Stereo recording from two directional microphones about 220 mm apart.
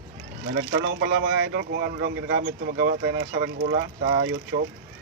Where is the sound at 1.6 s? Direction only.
50° right (ahead or behind).